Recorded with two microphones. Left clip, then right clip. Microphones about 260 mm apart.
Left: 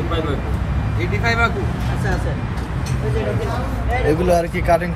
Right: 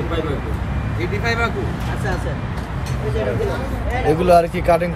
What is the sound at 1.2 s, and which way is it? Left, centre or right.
Speech, centre.